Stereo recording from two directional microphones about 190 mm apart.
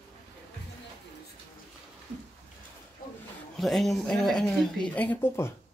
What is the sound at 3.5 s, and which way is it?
Speech, centre (ahead or behind).